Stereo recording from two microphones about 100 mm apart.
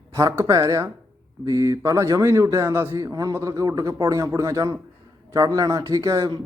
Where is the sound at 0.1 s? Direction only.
30° right (ahead or behind).